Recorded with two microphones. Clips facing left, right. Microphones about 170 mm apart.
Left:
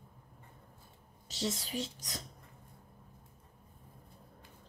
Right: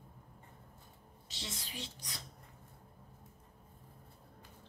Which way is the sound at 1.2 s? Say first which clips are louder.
Left 11 dB; 40° left (ahead or behind).